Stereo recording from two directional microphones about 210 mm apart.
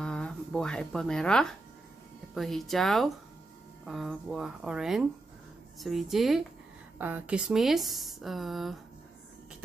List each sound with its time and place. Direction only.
0.0 s speech: 5° left (ahead or behind)